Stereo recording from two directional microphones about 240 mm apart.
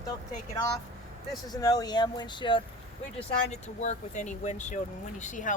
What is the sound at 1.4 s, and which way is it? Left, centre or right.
Speech, centre.